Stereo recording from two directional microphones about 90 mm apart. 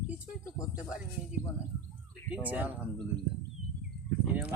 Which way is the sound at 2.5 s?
20° right (ahead or behind).